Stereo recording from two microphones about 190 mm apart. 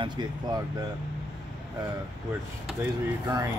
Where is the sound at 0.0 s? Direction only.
25° right (ahead or behind).